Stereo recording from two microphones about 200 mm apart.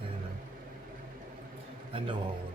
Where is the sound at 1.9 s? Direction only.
25° right (ahead or behind).